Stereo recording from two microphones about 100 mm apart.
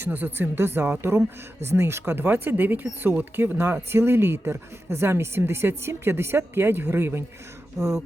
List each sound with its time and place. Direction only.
0.0 s speech: 20° right (ahead or behind)